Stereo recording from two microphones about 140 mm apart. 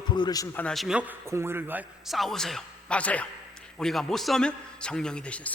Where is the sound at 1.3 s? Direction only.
20° right (ahead or behind).